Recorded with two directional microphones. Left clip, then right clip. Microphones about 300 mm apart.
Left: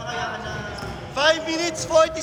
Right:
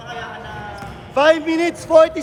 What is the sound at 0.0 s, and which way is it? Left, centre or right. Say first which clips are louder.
Basketball bounce: left 2 dB; centre.